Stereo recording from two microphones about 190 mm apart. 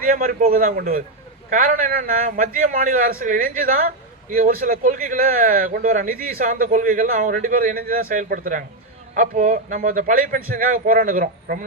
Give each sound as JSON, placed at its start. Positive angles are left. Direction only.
{"t": 0.0, "sound": "a man's voice", "side_deg": -45}